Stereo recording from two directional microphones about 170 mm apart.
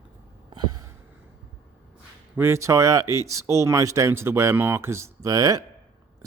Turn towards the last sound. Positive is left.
turn(degrees=-20)  # may be behind; listen again after turning